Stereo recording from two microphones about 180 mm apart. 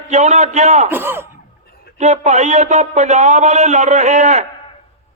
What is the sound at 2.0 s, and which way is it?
A man's voice, 40° right (ahead or behind).